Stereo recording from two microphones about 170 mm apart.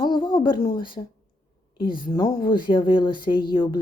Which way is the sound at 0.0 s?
30° left (ahead or behind).